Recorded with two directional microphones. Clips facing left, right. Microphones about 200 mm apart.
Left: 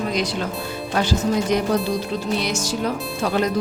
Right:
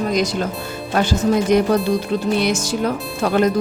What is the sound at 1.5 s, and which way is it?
Speech, 55° right (ahead or behind).